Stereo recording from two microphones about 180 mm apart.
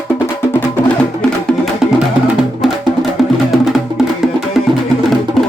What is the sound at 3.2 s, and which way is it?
Music, centre (ahead or behind).